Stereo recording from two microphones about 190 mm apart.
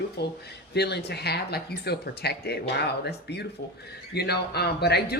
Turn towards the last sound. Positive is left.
turn(degrees=60)  # may be behind; listen again after turning